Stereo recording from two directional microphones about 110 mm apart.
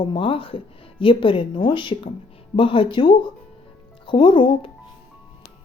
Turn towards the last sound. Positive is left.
turn(degrees=50)  # may be behind; listen again after turning